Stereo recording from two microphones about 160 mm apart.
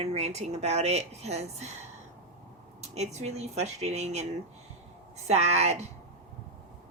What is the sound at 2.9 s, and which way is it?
Speech, 45° right (ahead or behind).